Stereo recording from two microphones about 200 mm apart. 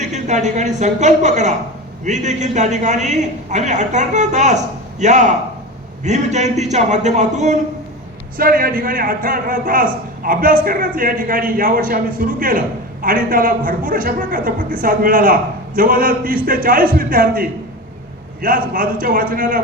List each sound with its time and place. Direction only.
0.0 s a woman's voice: 35° right (ahead or behind)